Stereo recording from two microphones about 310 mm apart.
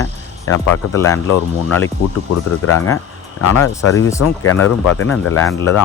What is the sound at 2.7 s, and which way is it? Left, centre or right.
Speech, left.